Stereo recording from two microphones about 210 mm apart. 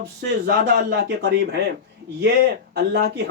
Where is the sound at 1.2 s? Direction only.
50° right (ahead or behind).